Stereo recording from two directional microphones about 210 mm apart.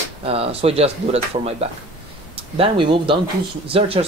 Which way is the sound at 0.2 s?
25° right (ahead or behind).